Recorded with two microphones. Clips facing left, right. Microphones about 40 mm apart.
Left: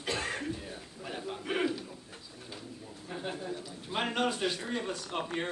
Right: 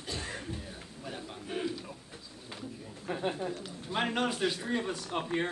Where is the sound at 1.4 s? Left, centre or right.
Left.